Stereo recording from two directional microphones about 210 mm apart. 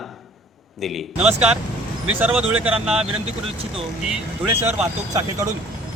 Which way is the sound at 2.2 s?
5° right (ahead or behind).